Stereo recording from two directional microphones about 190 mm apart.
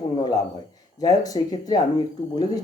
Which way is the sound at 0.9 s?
20° left (ahead or behind).